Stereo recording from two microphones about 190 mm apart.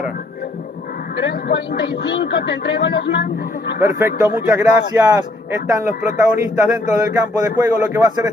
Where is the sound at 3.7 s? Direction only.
15° right (ahead or behind).